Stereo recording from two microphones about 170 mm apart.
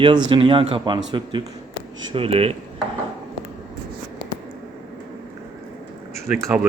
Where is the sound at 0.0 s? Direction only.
30° right (ahead or behind).